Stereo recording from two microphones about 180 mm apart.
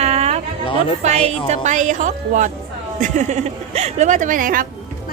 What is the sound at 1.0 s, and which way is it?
A woman's voice, 35° right (ahead or behind).